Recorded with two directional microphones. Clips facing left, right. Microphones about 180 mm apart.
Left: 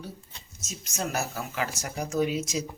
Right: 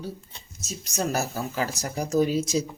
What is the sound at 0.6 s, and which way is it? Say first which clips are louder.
Speech: right 4 dB; 35° right (ahead or behind).